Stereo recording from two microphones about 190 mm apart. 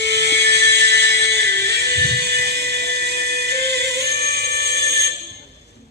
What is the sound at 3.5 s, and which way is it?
Music, 60° right (ahead or behind).